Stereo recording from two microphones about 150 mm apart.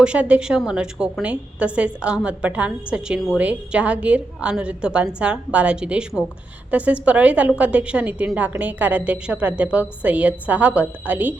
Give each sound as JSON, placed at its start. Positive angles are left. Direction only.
{"t": 0.0, "sound": "a woman's voice", "side_deg": -5}